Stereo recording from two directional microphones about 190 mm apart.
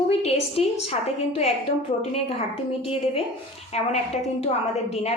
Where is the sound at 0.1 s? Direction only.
35° left (ahead or behind).